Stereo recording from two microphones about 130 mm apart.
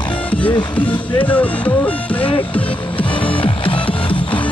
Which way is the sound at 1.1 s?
10° left (ahead or behind).